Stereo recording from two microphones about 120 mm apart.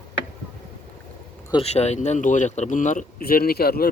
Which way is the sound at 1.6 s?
65° left (ahead or behind).